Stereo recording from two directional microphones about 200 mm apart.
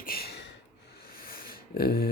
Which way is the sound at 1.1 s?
45° left (ahead or behind).